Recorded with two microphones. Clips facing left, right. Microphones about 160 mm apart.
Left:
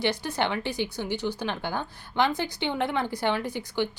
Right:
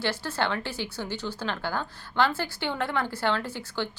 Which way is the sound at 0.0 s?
15° left (ahead or behind).